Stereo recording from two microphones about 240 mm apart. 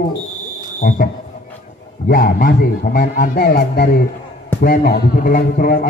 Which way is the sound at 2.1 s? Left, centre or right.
Left.